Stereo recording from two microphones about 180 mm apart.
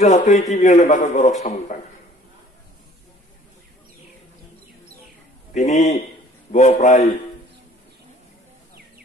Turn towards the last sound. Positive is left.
turn(degrees=40)  # may be behind; listen again after turning